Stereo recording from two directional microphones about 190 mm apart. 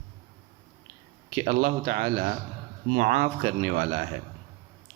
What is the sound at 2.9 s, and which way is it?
Speech, 40° right (ahead or behind).